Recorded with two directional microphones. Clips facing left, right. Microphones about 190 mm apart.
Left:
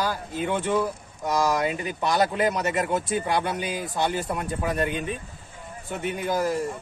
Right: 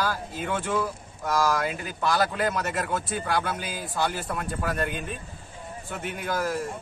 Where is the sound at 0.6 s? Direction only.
20° left (ahead or behind).